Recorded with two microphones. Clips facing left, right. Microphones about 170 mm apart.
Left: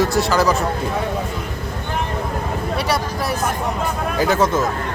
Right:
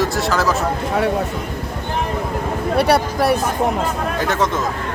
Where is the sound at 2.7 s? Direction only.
60° right (ahead or behind).